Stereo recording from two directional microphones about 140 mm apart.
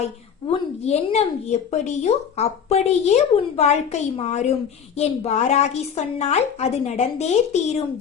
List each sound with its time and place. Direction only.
0.9 s speech: 50° left (ahead or behind)